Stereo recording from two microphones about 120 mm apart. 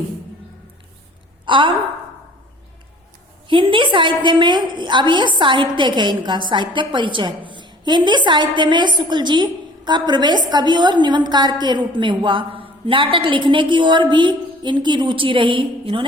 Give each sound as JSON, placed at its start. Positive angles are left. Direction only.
{"t": 1.5, "sound": "a woman's voice", "side_deg": -45}
{"t": 3.4, "sound": "a woman's voice", "side_deg": -45}